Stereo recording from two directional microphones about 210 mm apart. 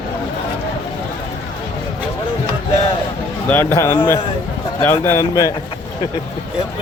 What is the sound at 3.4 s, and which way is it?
Speech, 10° left (ahead or behind).